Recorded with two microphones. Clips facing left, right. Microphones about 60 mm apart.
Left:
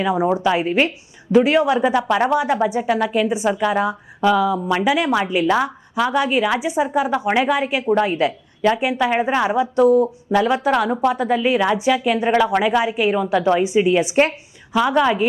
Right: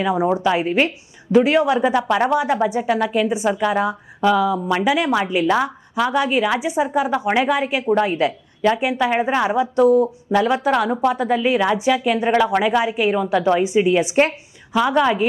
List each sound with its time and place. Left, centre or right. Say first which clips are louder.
0.0 s speech: even; left